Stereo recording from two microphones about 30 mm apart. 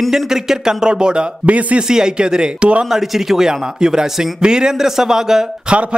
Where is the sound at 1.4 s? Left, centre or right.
Right.